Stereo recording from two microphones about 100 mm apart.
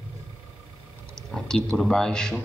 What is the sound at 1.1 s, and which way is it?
A man's voice, 5° left (ahead or behind).